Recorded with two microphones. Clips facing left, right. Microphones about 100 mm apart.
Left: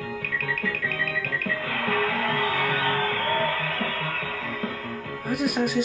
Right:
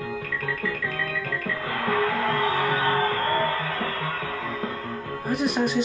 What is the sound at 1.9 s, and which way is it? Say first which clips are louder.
Music: right 2 dB; 20° right (ahead or behind).